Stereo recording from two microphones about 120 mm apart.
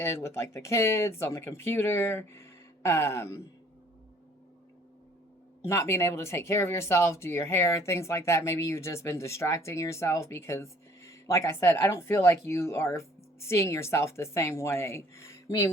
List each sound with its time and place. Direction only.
0.0 s speech: 20° left (ahead or behind)
5.6 s speech: 20° left (ahead or behind)